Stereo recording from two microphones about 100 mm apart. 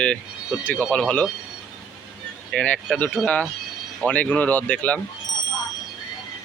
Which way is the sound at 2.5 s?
10° left (ahead or behind).